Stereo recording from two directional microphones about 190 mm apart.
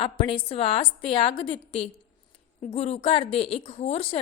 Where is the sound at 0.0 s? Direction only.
25° left (ahead or behind).